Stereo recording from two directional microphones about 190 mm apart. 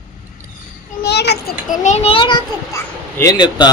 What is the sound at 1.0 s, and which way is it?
Children playing, 60° left (ahead or behind).